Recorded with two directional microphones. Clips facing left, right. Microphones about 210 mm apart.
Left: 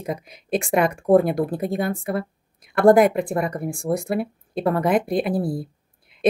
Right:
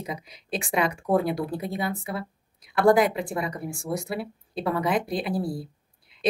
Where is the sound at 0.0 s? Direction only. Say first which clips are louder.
Left 6 dB; 50° left (ahead or behind).